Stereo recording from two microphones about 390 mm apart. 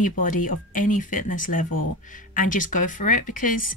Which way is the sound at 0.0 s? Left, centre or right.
Centre.